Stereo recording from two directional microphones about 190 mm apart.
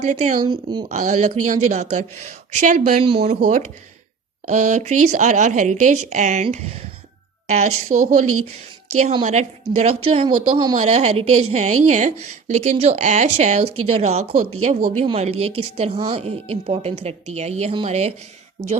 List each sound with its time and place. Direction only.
0.0 s a woman's voice: 35° right (ahead or behind)
0.3 s speech: 25° right (ahead or behind)
0.9 s a woman's voice: 40° right (ahead or behind)
10.8 s a woman's voice: 35° right (ahead or behind)